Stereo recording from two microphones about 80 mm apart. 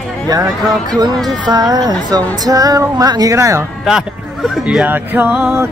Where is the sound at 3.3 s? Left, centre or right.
Right.